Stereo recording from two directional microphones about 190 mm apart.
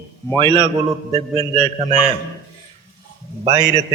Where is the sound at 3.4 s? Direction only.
20° right (ahead or behind).